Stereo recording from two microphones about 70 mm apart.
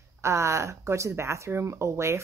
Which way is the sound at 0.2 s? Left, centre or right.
Right.